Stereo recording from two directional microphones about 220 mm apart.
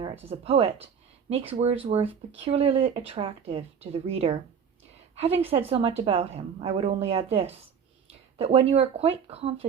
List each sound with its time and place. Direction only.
0.0 s speech: 25° right (ahead or behind)